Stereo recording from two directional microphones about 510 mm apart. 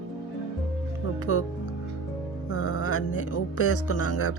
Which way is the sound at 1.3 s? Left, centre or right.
Left.